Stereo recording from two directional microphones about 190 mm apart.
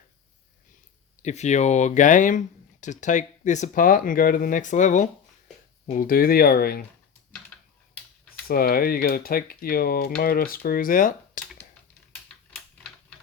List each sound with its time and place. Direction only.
1.2 s speech: 35° left (ahead or behind); by 6.8 s 55° left (ahead or behind)
8.4 s speech: 50° left (ahead or behind)